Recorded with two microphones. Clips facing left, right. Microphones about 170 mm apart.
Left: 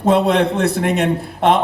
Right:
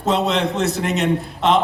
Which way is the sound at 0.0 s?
55° left (ahead or behind).